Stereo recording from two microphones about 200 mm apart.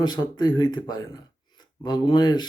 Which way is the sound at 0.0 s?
20° left (ahead or behind).